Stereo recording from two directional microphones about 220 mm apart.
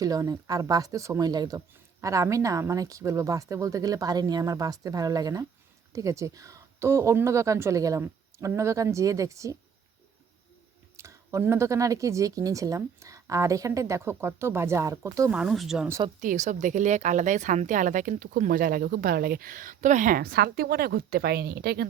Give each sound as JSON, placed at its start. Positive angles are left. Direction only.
{"t": 0.0, "sound": "speech", "side_deg": -15}
{"t": 10.9, "sound": "speech", "side_deg": -15}
{"t": 15.4, "sound": "speech", "side_deg": 0}
{"t": 16.2, "sound": "speech", "side_deg": -35}